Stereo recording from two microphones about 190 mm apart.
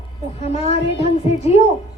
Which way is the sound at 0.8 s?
65° left (ahead or behind).